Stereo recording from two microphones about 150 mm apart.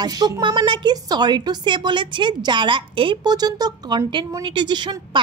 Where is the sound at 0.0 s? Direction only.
25° right (ahead or behind).